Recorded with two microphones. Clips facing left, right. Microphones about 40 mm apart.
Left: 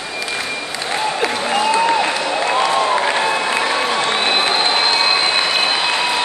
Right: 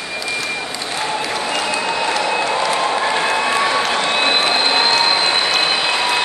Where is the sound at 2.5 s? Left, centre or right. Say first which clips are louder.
Left 2 dB; left.